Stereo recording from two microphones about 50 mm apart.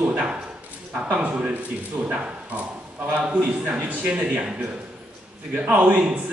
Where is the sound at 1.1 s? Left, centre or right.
Right.